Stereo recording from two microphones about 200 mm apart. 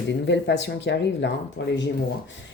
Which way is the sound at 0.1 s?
60° left (ahead or behind).